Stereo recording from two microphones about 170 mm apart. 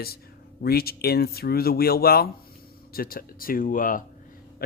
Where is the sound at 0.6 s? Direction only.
65° left (ahead or behind).